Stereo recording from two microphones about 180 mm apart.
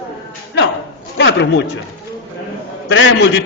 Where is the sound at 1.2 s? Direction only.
85° left.